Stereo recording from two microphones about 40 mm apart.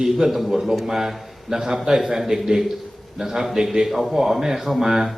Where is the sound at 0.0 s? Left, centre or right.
Centre.